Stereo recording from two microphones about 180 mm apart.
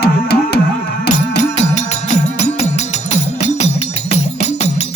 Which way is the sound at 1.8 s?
40° left (ahead or behind).